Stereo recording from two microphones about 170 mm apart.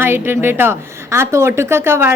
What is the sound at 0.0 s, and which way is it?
A woman's voice, 15° right (ahead or behind).